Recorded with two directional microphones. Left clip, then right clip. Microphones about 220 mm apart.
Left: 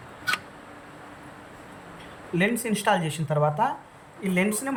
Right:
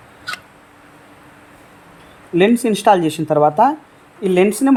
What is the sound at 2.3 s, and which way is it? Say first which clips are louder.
Speech: right 11 dB; 30° right (ahead or behind).